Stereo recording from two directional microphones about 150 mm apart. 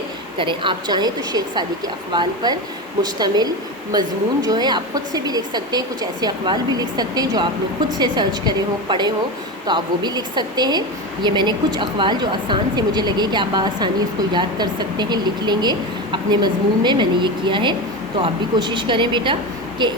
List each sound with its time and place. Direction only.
0.3 s a woman's voice: 35° right (ahead or behind)